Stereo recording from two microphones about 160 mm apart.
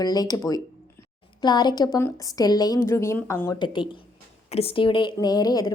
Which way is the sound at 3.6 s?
30° left (ahead or behind).